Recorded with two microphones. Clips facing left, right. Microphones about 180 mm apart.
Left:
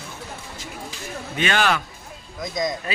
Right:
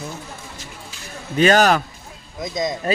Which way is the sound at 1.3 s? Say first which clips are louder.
Right 7 dB; 40° right (ahead or behind).